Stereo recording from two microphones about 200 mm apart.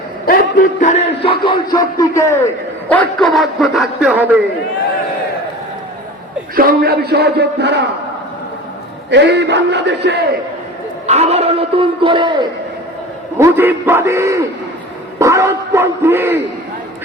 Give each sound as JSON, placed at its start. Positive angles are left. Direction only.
{"t": 0.3, "sound": "a man's voice", "side_deg": 40}
{"t": 6.6, "sound": "a sound", "side_deg": -50}
{"t": 9.0, "sound": "a man's voice", "side_deg": -60}
{"t": 11.0, "sound": "a man's voice", "side_deg": -35}
{"t": 13.4, "sound": "speech", "side_deg": -10}